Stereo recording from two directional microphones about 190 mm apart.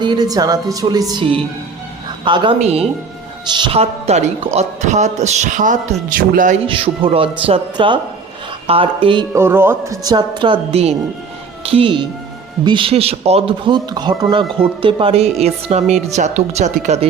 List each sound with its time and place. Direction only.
0.0 s a woman's voice: 20° right (ahead or behind); by 6.6 s 45° right (ahead or behind)
6.7 s a woman's voice: 30° right (ahead or behind)
9.3 s a woman's voice: 10° right (ahead or behind); by 17.1 s 35° right (ahead or behind)